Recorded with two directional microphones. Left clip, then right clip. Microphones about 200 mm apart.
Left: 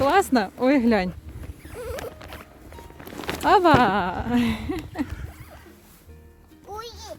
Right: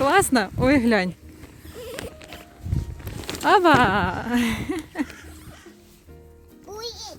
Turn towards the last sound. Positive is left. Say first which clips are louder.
# right 2 dB
turn(degrees=-10)  # may be behind; listen again after turning